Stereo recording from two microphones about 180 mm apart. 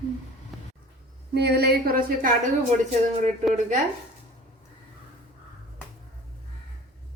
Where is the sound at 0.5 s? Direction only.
Centre (ahead or behind).